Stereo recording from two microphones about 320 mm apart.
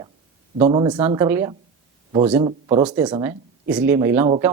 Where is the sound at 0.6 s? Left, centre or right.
Centre.